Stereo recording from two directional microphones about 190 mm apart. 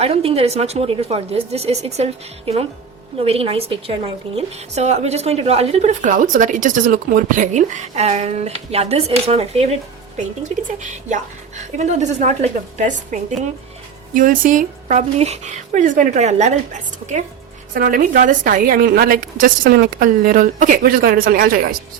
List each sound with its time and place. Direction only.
0.0 s a woman's voice: 30° right (ahead or behind)
11.1 s a woman's voice: 40° right (ahead or behind)